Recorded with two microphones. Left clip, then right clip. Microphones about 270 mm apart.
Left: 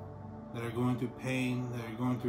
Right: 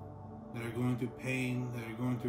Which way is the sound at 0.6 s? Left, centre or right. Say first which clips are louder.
Left 3 dB; centre.